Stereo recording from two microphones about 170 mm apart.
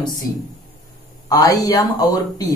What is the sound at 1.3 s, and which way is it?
Speech, 20° left (ahead or behind).